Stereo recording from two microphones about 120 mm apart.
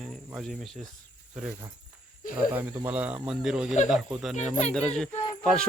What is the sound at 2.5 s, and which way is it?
Speech, 15° right (ahead or behind).